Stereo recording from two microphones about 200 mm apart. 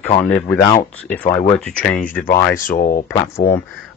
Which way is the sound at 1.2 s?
30° left (ahead or behind).